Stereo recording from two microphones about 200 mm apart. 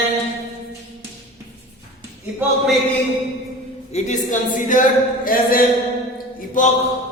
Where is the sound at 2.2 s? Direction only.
10° right (ahead or behind).